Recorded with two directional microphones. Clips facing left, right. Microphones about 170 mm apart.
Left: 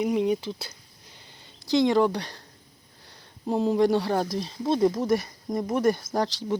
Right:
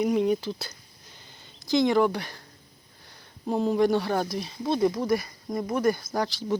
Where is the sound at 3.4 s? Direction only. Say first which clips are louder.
Left 1 dB; 20° left (ahead or behind).